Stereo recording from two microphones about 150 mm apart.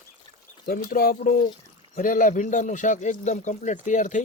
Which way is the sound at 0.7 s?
75° left (ahead or behind).